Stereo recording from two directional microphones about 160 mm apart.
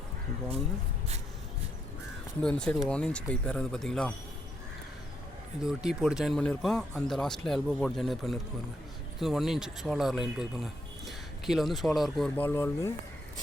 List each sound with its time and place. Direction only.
2.4 s speech: 5° left (ahead or behind)
5.6 s speech: 5° right (ahead or behind); by 12.9 s 15° left (ahead or behind)